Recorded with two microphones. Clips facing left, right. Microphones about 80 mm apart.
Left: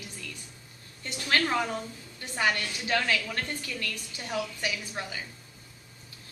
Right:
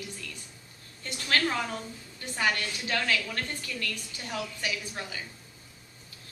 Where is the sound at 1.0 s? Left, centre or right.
Centre.